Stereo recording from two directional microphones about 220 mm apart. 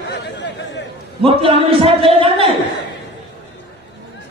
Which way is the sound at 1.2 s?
25° right (ahead or behind).